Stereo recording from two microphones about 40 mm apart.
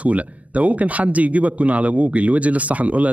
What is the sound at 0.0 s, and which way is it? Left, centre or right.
A man's voice, right.